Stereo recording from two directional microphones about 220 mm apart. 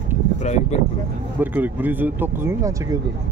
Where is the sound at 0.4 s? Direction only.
30° left (ahead or behind).